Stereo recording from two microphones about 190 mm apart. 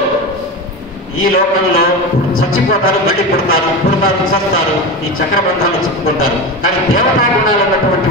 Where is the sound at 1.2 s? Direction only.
50° left (ahead or behind).